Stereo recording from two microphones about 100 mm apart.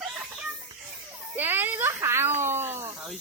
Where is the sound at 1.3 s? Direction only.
20° right (ahead or behind).